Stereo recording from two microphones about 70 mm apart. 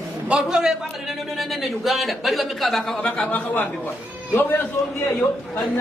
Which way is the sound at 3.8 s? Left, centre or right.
Left.